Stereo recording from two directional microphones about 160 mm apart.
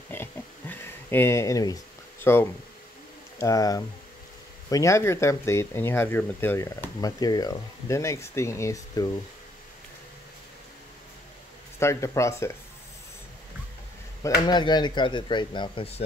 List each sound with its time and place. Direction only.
0.1 s oink: 15° left (ahead or behind)
3.3 s speech: 20° left (ahead or behind)
11.8 s speech: 20° left (ahead or behind)
14.4 s speech: 25° left (ahead or behind)